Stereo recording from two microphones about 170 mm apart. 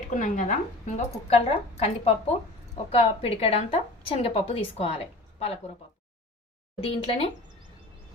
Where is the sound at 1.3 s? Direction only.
35° left (ahead or behind).